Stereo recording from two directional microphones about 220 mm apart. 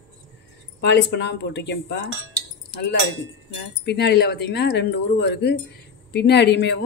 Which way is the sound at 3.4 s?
55° left (ahead or behind).